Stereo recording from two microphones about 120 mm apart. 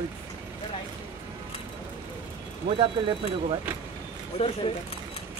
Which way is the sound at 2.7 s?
50° right (ahead or behind).